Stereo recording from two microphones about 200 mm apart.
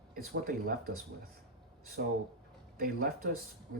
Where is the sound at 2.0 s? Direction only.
50° right (ahead or behind).